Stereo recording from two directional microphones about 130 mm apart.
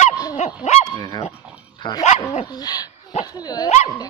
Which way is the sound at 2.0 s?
60° left (ahead or behind).